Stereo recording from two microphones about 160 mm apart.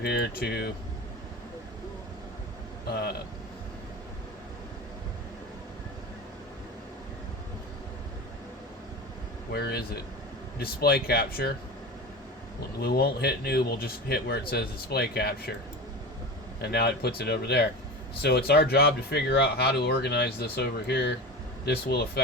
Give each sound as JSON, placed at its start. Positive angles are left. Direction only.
{"t": 0.0, "sound": "a man's voice", "side_deg": 85}
{"t": 2.9, "sound": "a man's voice", "side_deg": 80}
{"t": 9.5, "sound": "a man's voice", "side_deg": 85}
{"t": 12.8, "sound": "a man's voice", "side_deg": 80}
{"t": 16.6, "sound": "speech", "side_deg": 90}
{"t": 21.6, "sound": "a man's voice", "side_deg": 80}